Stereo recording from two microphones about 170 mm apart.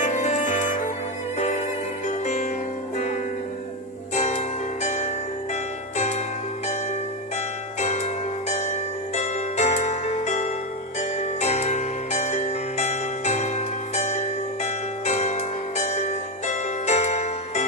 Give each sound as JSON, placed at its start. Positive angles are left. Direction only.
{"t": 0.0, "sound": "music", "side_deg": 40}
{"t": 2.0, "sound": "music", "side_deg": 45}
{"t": 4.1, "sound": "music", "side_deg": 40}
{"t": 7.8, "sound": "music", "side_deg": 40}